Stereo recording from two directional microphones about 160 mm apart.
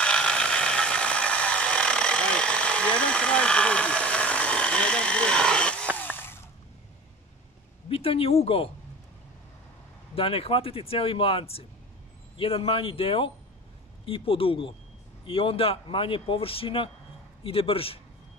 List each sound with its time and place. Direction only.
0.0 s a sound: 5° left (ahead or behind)
5.9 s ratchet: 10° left (ahead or behind)
7.9 s speech: 35° left (ahead or behind)
10.1 s speech: 35° left (ahead or behind)